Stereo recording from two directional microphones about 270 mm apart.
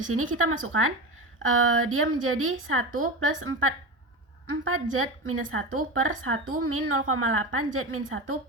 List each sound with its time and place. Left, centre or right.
0.1 s a woman's voice: right